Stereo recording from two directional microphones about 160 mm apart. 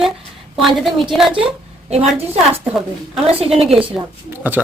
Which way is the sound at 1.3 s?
35° right (ahead or behind).